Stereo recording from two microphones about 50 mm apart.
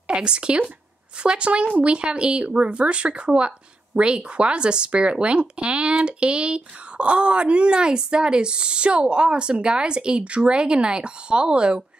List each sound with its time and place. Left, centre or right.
0.1 s speech: centre